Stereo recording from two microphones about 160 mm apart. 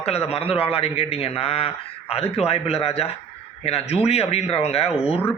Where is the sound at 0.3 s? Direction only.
35° left (ahead or behind).